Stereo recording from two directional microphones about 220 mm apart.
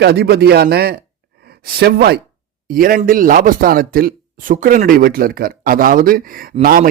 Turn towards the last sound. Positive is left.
turn(degrees=-40)  # may be behind; listen again after turning